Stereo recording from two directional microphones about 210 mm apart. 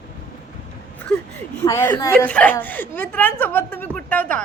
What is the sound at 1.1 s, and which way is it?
Speech, 5° left (ahead or behind).